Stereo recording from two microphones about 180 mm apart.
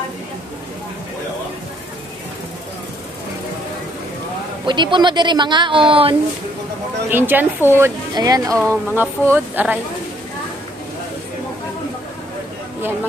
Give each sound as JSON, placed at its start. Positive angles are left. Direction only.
{"t": 4.6, "sound": "speech", "side_deg": -25}
{"t": 7.1, "sound": "speech", "side_deg": -10}